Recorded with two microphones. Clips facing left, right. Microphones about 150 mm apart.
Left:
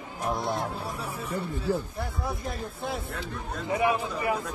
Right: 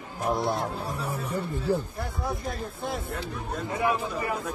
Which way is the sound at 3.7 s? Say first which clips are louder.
Left 2 dB; 15° left (ahead or behind).